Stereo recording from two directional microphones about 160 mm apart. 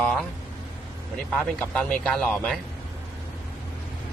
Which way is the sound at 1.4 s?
5° left (ahead or behind).